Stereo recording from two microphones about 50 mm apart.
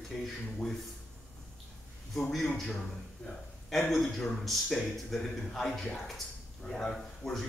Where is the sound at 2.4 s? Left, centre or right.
Centre.